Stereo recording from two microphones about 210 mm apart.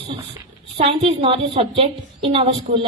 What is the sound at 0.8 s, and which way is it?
A woman's voice, 30° right (ahead or behind).